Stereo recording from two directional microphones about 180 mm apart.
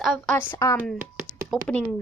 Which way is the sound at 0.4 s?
15° left (ahead or behind).